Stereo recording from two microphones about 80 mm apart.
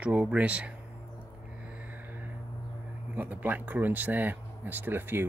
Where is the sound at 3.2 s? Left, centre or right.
Right.